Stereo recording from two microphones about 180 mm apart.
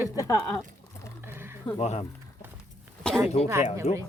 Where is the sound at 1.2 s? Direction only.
10° right (ahead or behind).